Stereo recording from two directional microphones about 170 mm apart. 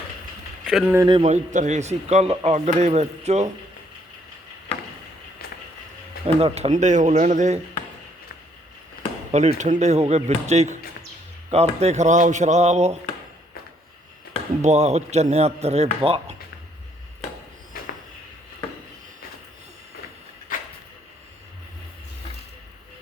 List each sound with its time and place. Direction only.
0.6 s speech: centre (ahead or behind)
1.0 s a man's voice: 35° right (ahead or behind)
6.2 s speech: 35° right (ahead or behind)
9.3 s a man's voice: 45° right (ahead or behind)
14.6 s a man's voice: 40° right (ahead or behind)